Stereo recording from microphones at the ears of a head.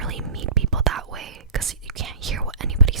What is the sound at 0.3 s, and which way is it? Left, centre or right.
Whispering, right.